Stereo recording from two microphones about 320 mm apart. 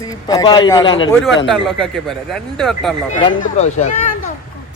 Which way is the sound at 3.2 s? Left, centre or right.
Left.